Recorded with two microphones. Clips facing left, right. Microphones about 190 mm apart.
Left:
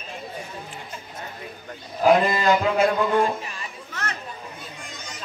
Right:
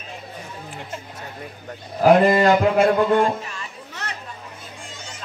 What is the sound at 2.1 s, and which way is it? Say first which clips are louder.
Speech: right 4 dB; 55° right (ahead or behind).